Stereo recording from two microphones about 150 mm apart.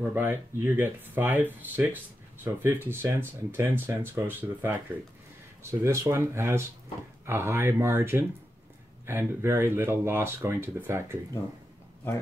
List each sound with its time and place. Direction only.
0.1 s speech: 15° right (ahead or behind)